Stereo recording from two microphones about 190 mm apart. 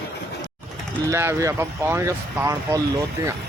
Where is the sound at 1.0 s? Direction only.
15° right (ahead or behind).